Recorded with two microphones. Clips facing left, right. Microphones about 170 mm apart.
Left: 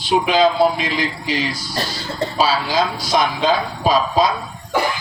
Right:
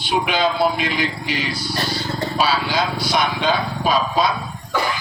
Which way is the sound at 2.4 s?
35° left (ahead or behind).